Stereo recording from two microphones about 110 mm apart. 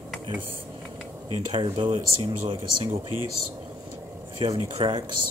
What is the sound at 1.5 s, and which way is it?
Speech, 45° right (ahead or behind).